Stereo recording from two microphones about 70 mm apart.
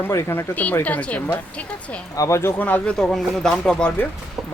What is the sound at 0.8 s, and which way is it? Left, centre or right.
Speech, left.